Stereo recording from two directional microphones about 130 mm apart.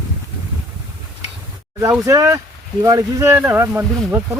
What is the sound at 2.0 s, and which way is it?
Speech, 25° right (ahead or behind).